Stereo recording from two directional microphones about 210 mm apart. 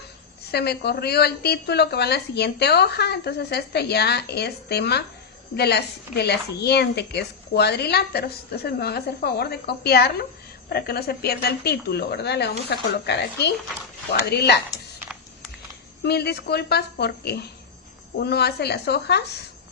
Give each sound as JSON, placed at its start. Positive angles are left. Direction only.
{"t": 0.5, "sound": "speech", "side_deg": 50}
{"t": 16.0, "sound": "speech", "side_deg": 50}